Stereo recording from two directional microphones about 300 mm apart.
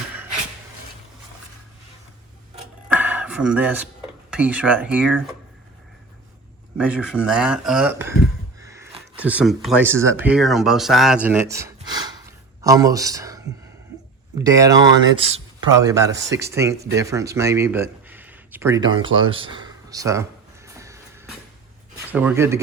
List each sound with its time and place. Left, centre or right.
2.9 s a sound: centre
4.3 s speech: centre
6.7 s speech: centre
12.2 s a sound: centre
14.3 s speech: centre
20.7 s music: centre
22.1 s speech: centre